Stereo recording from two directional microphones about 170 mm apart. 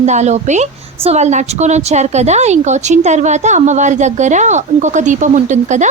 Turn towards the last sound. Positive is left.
turn(degrees=-45)  # may be behind; listen again after turning